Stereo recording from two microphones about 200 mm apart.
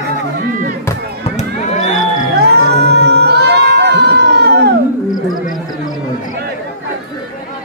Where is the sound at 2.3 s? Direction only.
55° right (ahead or behind).